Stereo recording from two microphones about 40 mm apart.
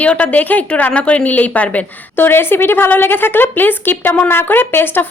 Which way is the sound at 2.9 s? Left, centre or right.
Left.